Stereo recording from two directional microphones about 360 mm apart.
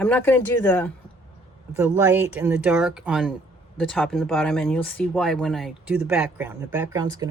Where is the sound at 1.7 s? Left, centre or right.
Centre.